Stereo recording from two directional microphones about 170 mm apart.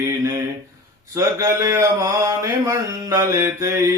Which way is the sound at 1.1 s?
20° right (ahead or behind).